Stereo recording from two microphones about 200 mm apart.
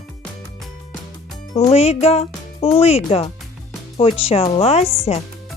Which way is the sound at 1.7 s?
30° left (ahead or behind).